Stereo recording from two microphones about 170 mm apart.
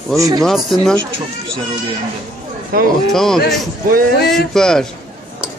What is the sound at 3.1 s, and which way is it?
Speech, centre (ahead or behind).